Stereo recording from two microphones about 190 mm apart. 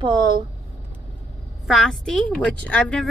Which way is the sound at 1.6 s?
Centre (ahead or behind).